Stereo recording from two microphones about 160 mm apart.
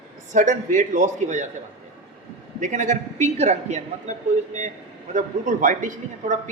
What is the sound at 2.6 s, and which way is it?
A woman's voice, 50° right (ahead or behind).